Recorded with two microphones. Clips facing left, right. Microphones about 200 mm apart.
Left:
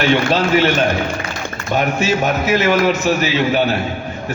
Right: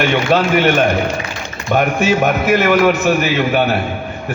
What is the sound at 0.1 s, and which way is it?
A man's voice, 55° right (ahead or behind).